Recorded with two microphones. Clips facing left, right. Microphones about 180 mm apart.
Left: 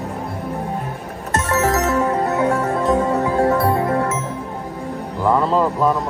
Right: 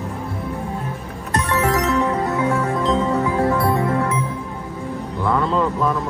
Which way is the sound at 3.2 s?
35° left (ahead or behind).